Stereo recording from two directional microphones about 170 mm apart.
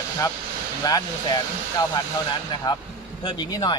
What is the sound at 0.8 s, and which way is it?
Speech, 20° left (ahead or behind).